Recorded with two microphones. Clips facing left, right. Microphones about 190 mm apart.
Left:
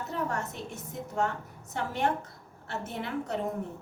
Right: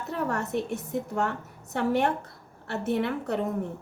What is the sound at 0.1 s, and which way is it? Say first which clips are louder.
A woman's voice: right 6 dB; 65° right (ahead or behind).